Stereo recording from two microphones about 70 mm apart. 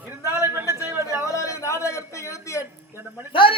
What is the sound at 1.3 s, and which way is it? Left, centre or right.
A man's voice, left.